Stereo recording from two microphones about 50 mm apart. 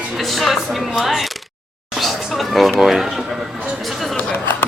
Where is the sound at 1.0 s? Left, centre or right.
Centre.